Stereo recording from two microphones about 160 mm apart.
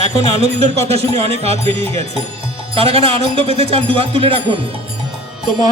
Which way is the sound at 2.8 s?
35° right (ahead or behind).